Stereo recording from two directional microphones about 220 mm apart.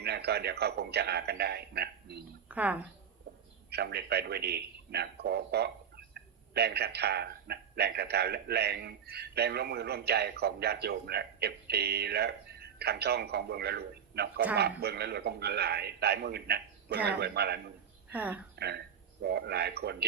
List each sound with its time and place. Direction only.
0.0 s a man's voice: 45° right (ahead or behind)
2.5 s a woman's voice: 5° right (ahead or behind)
3.7 s a man's voice: 45° right (ahead or behind)
18.1 s speech: 5° right (ahead or behind)
18.5 s a man's voice: 50° right (ahead or behind)